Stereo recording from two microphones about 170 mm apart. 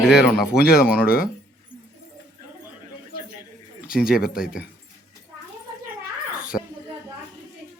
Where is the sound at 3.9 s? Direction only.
5° right (ahead or behind).